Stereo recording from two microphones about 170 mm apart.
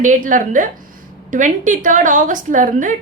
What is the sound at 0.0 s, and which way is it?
A woman's voice, 50° right (ahead or behind).